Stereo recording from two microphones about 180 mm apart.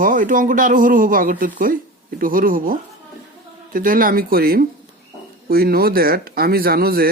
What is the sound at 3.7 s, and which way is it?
Speech, 50° right (ahead or behind).